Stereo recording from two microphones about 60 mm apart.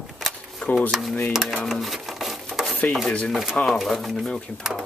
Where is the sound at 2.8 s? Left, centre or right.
Left.